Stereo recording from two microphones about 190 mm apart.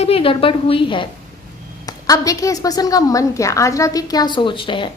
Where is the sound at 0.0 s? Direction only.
30° left (ahead or behind).